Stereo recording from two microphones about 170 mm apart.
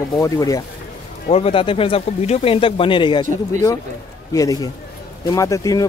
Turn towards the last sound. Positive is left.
turn(degrees=20)  # may be behind; listen again after turning